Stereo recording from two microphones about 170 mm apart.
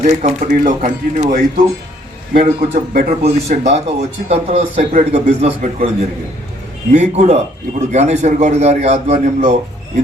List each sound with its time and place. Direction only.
0.0 s a man's voice: 40° right (ahead or behind)
0.4 s a man's voice: 55° right (ahead or behind)
2.4 s a man's voice: 50° right (ahead or behind)
6.9 s a man's voice: 45° right (ahead or behind)